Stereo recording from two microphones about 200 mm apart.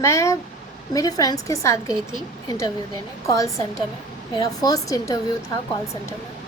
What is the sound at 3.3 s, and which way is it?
A woman's voice, 15° left (ahead or behind).